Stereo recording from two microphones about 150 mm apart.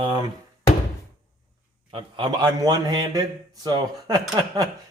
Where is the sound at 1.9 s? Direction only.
35° right (ahead or behind).